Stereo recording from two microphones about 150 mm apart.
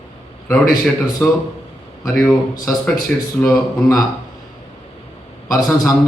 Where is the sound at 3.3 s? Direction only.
15° left (ahead or behind).